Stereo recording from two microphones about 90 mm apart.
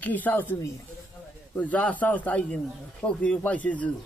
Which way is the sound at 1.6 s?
15° left (ahead or behind).